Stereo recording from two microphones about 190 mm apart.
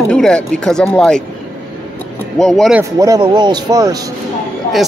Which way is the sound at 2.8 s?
15° right (ahead or behind).